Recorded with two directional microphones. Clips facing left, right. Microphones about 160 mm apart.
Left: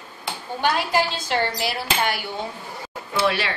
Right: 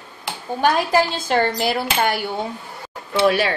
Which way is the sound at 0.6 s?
45° right (ahead or behind).